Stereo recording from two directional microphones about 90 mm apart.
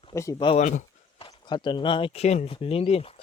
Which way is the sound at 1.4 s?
60° left (ahead or behind).